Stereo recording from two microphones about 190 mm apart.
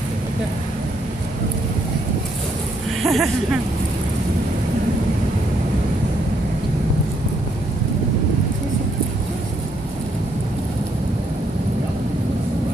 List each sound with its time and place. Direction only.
3.0 s speech: centre (ahead or behind)